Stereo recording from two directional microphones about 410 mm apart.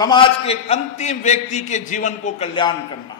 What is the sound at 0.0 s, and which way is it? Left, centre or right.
A man's voice, centre.